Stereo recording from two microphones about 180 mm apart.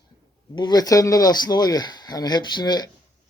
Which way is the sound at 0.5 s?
25° left (ahead or behind).